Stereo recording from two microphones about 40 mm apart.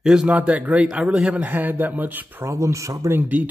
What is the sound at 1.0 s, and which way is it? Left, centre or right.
Speech, centre.